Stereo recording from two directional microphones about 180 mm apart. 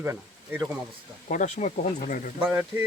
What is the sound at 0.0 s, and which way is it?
Speech, 15° right (ahead or behind).